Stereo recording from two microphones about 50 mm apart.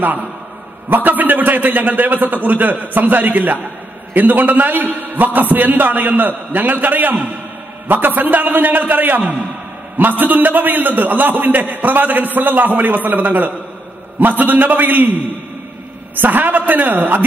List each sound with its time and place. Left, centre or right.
0.0 s a man's voice: right
16.2 s a man's voice: right